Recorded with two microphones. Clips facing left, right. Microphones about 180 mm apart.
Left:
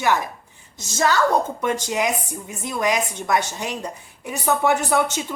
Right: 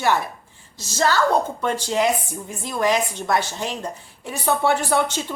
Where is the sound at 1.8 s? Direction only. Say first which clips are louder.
Right 2 dB; 15° left (ahead or behind).